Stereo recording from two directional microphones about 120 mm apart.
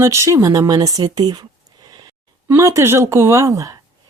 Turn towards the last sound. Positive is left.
turn(degrees=-25)  # may be behind; listen again after turning